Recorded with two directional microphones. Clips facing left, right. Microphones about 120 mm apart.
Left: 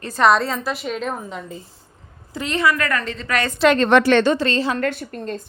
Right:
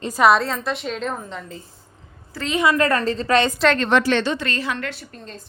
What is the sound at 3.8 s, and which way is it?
Speech, 55° left (ahead or behind).